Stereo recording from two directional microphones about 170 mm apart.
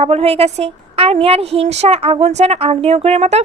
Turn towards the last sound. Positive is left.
turn(degrees=-40)  # may be behind; listen again after turning